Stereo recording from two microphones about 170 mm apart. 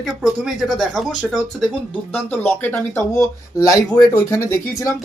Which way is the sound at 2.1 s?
10° left (ahead or behind).